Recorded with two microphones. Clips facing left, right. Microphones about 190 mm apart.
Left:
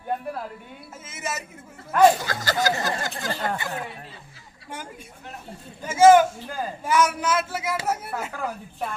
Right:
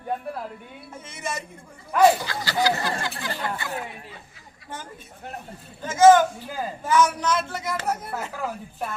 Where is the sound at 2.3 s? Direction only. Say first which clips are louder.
Even; 45° left (ahead or behind).